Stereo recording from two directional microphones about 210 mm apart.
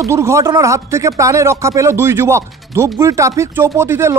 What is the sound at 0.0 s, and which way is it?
Speech, 15° right (ahead or behind).